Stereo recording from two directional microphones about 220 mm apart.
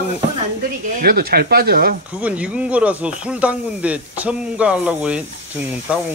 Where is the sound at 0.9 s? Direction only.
45° right (ahead or behind).